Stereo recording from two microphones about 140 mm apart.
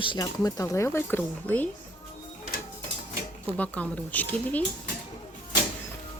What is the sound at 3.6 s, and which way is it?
Speech, 10° left (ahead or behind).